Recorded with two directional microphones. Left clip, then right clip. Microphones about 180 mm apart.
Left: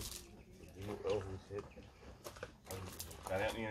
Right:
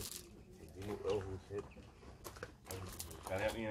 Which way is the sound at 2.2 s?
25° right (ahead or behind).